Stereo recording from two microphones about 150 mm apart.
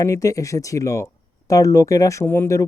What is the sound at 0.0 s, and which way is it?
Speech, 20° left (ahead or behind).